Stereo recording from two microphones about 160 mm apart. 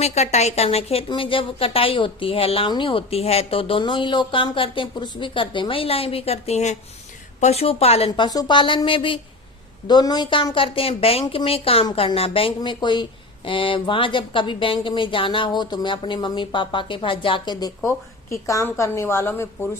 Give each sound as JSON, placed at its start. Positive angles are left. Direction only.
{"t": 0.0, "sound": "a woman's voice", "side_deg": 45}
{"t": 17.7, "sound": "a woman's voice", "side_deg": 15}